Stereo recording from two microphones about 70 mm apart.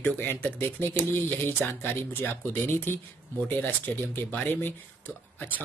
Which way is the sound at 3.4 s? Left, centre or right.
Left.